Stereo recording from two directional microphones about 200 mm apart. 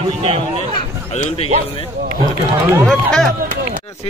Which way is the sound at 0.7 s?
30° left (ahead or behind).